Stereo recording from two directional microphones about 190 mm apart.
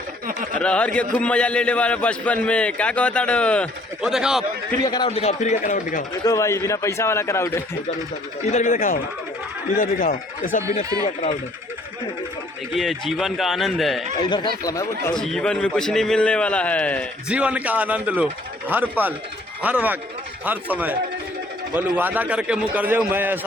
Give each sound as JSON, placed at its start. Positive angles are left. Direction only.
{"t": 0.6, "sound": "a man's voice", "side_deg": 5}
{"t": 4.8, "sound": "a man's voice", "side_deg": 20}
{"t": 5.0, "sound": "a man's voice", "side_deg": 35}
{"t": 6.2, "sound": "a man's voice", "side_deg": 15}
{"t": 8.4, "sound": "a man's voice", "side_deg": 40}
{"t": 11.0, "sound": "a man's voice", "side_deg": 30}
{"t": 12.7, "sound": "a man's voice", "side_deg": 0}
{"t": 14.3, "sound": "a man's voice", "side_deg": 25}
{"t": 15.1, "sound": "a man's voice", "side_deg": 5}
{"t": 17.2, "sound": "a man's voice", "side_deg": -5}